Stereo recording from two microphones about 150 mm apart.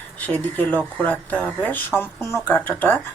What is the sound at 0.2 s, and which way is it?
Speech, 10° left (ahead or behind).